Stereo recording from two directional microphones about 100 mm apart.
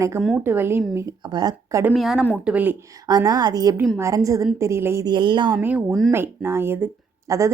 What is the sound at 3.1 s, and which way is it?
Speech, 40° right (ahead or behind).